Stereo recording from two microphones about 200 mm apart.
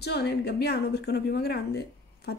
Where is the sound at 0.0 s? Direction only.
55° left (ahead or behind).